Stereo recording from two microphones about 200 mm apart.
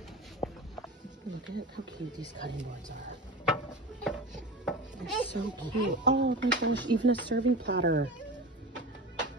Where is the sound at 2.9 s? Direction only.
60° right (ahead or behind).